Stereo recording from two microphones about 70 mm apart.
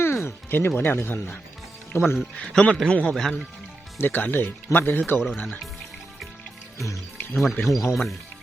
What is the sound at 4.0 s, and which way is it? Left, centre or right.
Speech, left.